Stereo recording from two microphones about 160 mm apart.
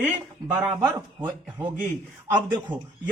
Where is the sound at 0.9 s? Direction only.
15° right (ahead or behind).